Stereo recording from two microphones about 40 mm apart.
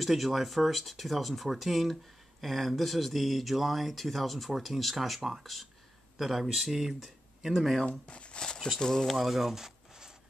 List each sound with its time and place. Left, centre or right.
0.0 s speech: centre
8.1 s speech: left
8.5 s speech: centre
8.8 s speech: centre
9.1 s speech: centre